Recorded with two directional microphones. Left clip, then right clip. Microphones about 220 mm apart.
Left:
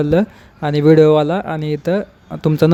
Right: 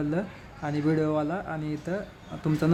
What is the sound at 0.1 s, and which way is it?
Speech, 40° left (ahead or behind).